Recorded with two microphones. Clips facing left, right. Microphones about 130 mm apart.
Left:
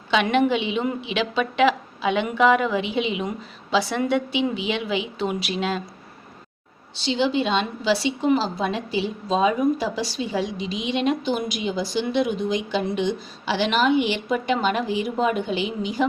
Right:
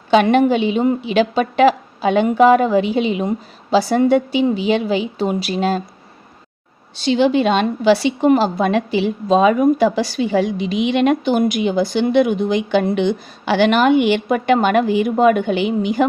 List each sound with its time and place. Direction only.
0.1 s a woman's voice: 45° right (ahead or behind)
7.0 s a woman's voice: 55° right (ahead or behind)